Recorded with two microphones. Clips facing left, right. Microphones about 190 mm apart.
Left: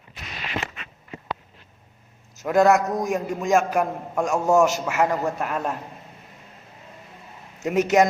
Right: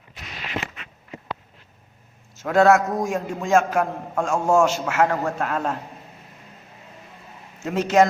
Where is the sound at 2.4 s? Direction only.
Centre (ahead or behind).